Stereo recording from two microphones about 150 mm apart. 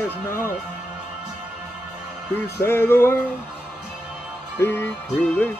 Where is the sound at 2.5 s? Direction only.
15° left (ahead or behind).